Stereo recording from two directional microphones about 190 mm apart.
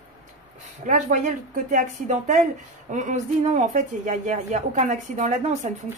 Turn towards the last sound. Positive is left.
turn(degrees=-40)  # may be behind; listen again after turning